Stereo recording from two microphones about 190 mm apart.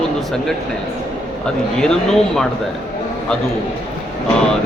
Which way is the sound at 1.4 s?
5° left (ahead or behind).